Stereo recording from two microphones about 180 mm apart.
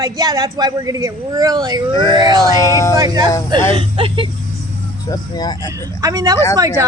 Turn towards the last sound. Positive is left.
turn(degrees=-20)  # may be behind; listen again after turning